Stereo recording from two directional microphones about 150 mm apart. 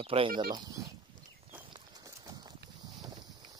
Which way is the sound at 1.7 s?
25° right (ahead or behind).